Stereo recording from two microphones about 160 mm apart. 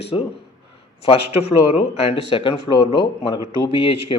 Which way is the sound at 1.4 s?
35° left (ahead or behind).